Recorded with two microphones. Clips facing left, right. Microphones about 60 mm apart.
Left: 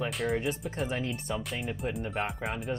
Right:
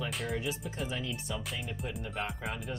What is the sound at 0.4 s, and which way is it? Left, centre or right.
Speech, left.